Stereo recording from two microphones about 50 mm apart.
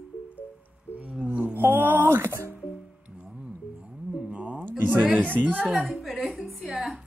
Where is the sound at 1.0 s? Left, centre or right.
Right.